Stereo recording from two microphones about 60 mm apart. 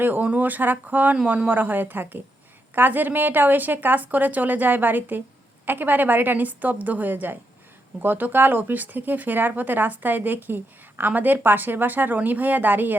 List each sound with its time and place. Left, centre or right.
0.0 s speech: right